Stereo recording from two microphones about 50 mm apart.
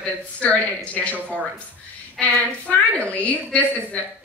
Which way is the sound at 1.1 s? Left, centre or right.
Right.